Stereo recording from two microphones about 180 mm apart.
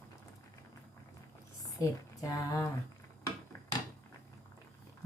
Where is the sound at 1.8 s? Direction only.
15° left (ahead or behind).